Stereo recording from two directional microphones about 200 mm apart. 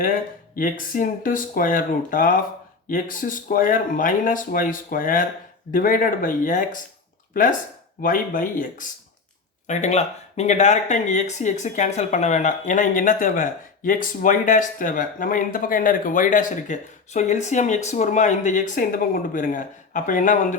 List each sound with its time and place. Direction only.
0.0 s speech: 45° left (ahead or behind)
8.0 s speech: 45° left (ahead or behind)